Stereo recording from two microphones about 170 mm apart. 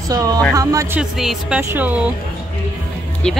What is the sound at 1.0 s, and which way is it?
Speech, 5° right (ahead or behind).